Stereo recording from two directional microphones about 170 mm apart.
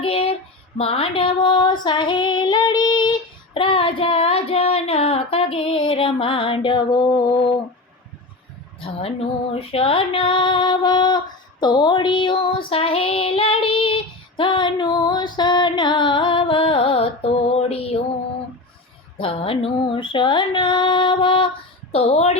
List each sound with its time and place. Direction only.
0.0 s child singing: 35° left (ahead or behind)
0.8 s female singing: 35° left (ahead or behind)
8.8 s female singing: 35° left (ahead or behind)
11.6 s child singing: 25° left (ahead or behind)
19.2 s female singing: 35° left (ahead or behind)
21.9 s a sound: 40° left (ahead or behind)